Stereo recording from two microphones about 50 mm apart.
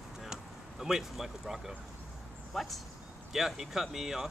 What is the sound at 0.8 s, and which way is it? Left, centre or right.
Speech, centre.